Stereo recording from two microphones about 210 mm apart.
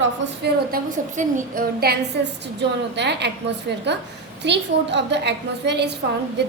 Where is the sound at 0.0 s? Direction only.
50° right (ahead or behind).